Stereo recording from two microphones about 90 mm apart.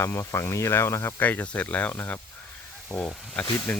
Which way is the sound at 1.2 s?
15° left (ahead or behind).